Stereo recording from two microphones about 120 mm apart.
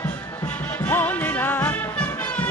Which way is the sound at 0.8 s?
15° left (ahead or behind).